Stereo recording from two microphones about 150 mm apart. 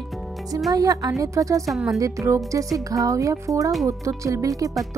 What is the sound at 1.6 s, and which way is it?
Speech, centre (ahead or behind).